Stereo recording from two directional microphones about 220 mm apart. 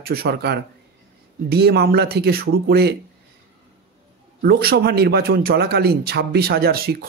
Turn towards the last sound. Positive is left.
turn(degrees=-45)  # may be behind; listen again after turning